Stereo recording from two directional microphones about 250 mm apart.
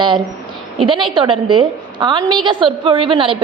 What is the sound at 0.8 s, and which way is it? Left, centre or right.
A woman's voice, centre.